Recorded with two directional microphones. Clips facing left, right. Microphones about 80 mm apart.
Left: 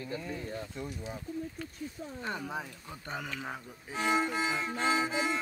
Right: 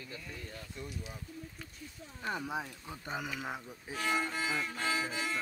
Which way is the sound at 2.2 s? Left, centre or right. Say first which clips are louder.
Right 1 dB; centre.